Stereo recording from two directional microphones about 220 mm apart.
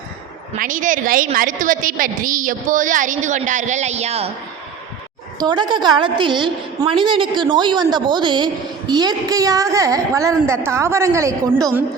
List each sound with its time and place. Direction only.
0.6 s a woman's voice: 35° right (ahead or behind)
5.4 s a woman's voice: 20° right (ahead or behind)